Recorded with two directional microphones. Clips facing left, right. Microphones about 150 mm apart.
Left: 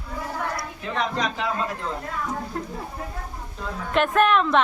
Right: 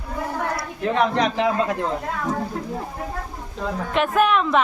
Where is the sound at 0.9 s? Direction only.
65° right (ahead or behind).